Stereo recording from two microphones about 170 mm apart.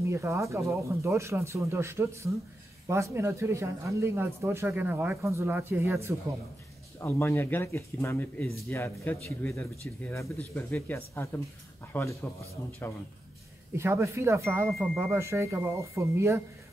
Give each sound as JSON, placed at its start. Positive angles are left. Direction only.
{"t": 0.0, "sound": "speech", "side_deg": -15}
{"t": 7.0, "sound": "speech", "side_deg": 15}
{"t": 13.7, "sound": "speech", "side_deg": -15}